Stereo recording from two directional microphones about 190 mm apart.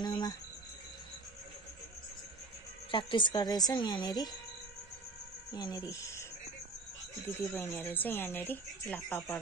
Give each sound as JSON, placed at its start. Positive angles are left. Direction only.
{"t": 0.0, "sound": "cricket", "side_deg": 20}
{"t": 2.9, "sound": "a woman's voice", "side_deg": 25}
{"t": 5.5, "sound": "speech", "side_deg": 20}
{"t": 7.2, "sound": "speech", "side_deg": 10}